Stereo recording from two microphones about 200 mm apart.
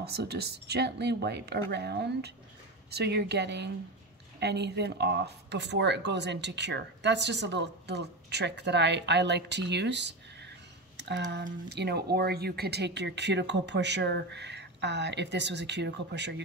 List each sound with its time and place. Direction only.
0.0 s speech: 55° right (ahead or behind)